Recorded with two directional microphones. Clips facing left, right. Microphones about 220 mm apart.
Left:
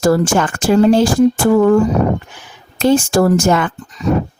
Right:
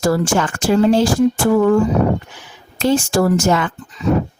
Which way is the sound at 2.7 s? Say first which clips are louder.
Left 3 dB; 50° left (ahead or behind).